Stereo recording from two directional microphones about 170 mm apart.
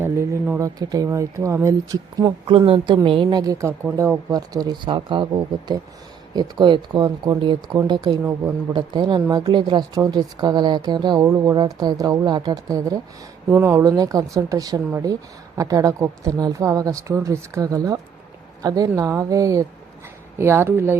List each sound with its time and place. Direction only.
0.0 s speech: 15° right (ahead or behind)